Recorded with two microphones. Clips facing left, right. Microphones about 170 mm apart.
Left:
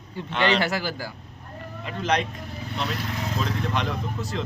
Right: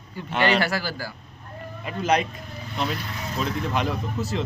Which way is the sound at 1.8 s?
5° right (ahead or behind).